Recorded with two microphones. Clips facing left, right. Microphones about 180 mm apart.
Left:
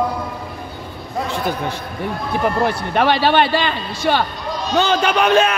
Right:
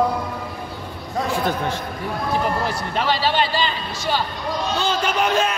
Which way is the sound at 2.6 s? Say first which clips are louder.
Left 6 dB; 60° left (ahead or behind).